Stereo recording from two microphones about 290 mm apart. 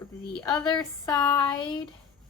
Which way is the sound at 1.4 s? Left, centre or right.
Centre.